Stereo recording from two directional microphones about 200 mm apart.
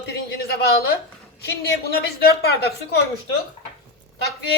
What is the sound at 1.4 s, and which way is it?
A woman's voice, 55° left (ahead or behind).